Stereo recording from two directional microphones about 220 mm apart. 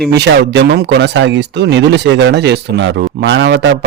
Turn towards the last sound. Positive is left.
turn(degrees=-55)  # may be behind; listen again after turning